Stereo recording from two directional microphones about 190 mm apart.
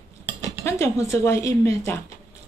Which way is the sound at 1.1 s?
15° left (ahead or behind).